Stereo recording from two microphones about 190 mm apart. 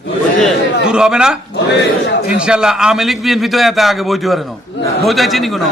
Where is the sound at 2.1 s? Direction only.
55° left (ahead or behind).